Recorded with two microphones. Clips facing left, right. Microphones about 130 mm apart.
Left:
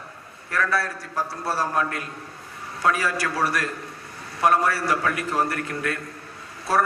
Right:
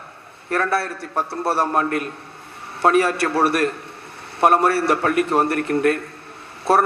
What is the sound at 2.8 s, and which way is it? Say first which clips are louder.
A man's voice: right 7 dB; 60° right (ahead or behind).